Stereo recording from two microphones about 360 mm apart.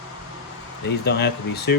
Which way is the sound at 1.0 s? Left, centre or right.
Left.